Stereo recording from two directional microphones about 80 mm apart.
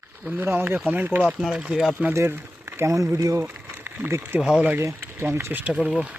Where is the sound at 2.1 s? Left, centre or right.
Right.